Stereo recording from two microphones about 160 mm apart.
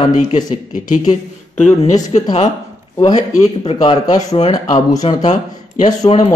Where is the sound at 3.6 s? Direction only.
40° left (ahead or behind).